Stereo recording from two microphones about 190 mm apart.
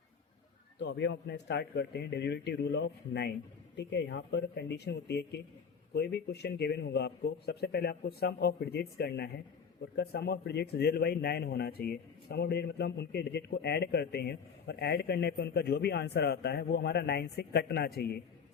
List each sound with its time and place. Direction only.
0.8 s speech: 70° left (ahead or behind)